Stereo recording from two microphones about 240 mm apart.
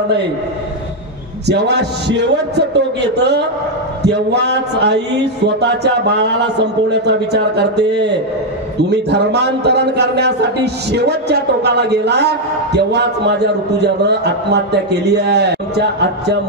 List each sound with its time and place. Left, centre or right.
1.5 s a man's voice: right